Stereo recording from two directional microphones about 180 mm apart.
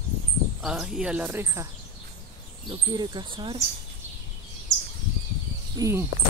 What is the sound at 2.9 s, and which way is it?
Speech, 25° right (ahead or behind).